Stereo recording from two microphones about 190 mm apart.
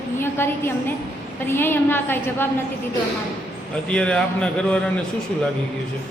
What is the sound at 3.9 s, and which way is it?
Speech, 5° left (ahead or behind).